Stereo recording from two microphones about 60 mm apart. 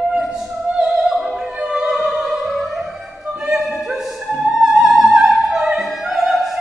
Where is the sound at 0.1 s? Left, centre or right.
Centre.